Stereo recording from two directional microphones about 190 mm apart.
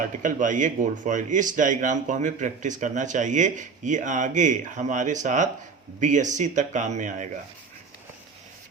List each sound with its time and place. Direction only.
0.2 s a man's voice: 45° right (ahead or behind)